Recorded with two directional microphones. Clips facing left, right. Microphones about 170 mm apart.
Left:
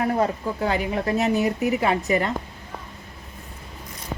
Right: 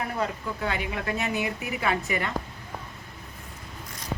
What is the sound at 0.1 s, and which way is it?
Speech, 40° left (ahead or behind).